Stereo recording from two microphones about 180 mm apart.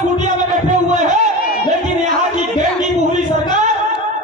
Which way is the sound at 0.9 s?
40° right (ahead or behind).